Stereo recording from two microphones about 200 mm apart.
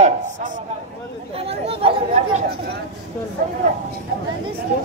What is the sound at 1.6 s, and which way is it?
Chatter, 30° right (ahead or behind).